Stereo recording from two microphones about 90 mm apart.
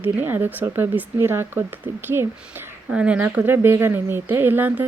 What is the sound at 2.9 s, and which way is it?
Speech, 15° right (ahead or behind).